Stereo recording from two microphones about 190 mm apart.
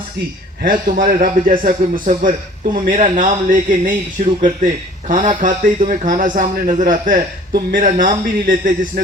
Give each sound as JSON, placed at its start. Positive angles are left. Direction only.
{"t": 0.6, "sound": "speech", "side_deg": -50}